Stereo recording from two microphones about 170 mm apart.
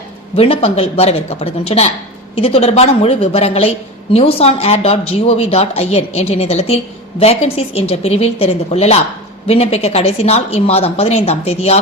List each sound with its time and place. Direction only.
0.3 s speech: 35° left (ahead or behind)